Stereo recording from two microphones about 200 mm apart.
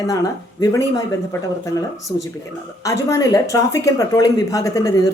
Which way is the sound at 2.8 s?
15° left (ahead or behind).